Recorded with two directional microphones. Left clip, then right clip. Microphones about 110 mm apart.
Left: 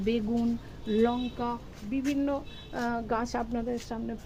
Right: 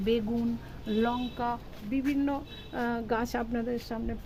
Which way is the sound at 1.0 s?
40° right (ahead or behind).